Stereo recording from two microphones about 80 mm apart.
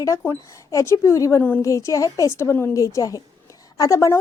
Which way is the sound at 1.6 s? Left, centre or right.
Left.